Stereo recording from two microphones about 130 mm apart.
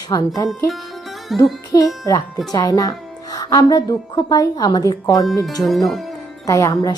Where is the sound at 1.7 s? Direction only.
30° left (ahead or behind).